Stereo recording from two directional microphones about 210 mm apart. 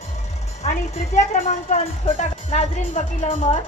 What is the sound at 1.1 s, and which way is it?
Speech, 35° left (ahead or behind).